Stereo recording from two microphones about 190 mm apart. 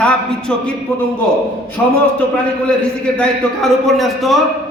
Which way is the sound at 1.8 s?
5° left (ahead or behind).